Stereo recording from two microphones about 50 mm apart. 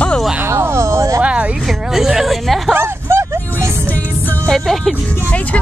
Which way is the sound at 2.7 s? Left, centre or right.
Right.